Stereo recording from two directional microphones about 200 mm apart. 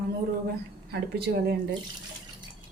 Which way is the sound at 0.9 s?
55° right (ahead or behind).